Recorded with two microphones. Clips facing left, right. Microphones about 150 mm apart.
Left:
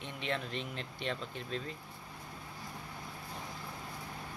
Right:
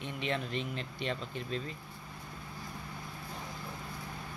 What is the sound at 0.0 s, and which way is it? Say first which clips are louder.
Speech: right 2 dB; centre (ahead or behind).